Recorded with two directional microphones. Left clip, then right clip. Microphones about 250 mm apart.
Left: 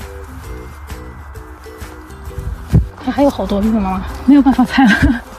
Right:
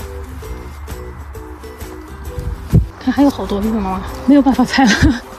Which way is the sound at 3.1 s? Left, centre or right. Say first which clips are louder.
Left 1 dB; centre.